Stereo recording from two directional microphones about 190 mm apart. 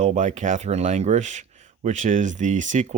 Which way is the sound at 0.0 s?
40° right (ahead or behind).